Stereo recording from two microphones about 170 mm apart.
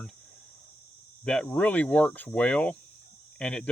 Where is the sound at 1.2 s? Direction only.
5° left (ahead or behind).